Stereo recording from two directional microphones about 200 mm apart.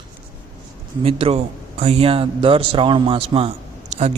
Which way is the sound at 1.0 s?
30° right (ahead or behind).